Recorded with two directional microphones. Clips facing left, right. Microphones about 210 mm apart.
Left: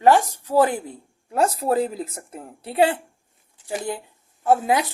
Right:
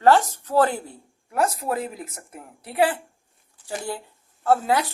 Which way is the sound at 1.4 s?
30° left (ahead or behind).